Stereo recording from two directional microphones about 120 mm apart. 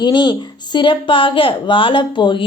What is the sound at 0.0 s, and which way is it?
A woman's voice, 40° left (ahead or behind).